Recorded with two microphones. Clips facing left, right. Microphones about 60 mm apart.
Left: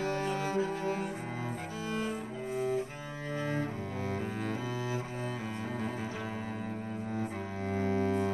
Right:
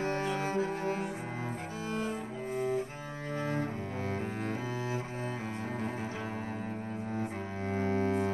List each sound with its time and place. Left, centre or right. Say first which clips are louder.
0.0 s cello: even; right
7.2 s double bass: even; right